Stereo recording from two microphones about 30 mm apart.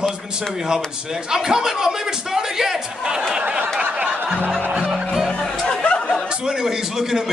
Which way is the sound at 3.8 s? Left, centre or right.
Right.